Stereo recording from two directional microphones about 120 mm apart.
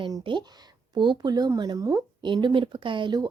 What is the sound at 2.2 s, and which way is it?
Speech, 40° right (ahead or behind).